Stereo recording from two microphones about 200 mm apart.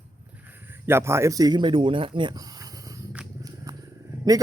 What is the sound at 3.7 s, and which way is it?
Wild animals, 20° right (ahead or behind).